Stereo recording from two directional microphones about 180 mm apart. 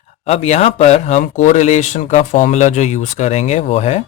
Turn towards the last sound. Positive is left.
turn(degrees=35)  # may be behind; listen again after turning